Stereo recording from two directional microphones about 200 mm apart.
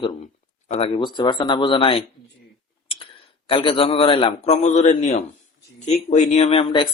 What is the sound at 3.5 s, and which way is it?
A man's voice, 25° left (ahead or behind).